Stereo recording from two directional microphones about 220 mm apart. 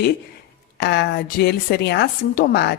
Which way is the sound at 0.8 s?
50° left (ahead or behind).